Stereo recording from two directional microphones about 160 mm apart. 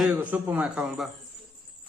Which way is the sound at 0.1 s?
10° right (ahead or behind).